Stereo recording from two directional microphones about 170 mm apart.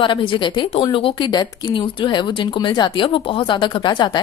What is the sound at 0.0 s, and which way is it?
A woman's voice, 30° left (ahead or behind).